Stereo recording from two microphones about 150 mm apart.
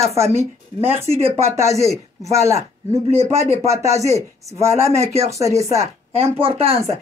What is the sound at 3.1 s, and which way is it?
A woman's voice, 45° right (ahead or behind).